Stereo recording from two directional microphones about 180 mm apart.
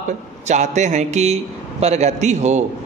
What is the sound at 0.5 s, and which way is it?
Speech, 40° right (ahead or behind).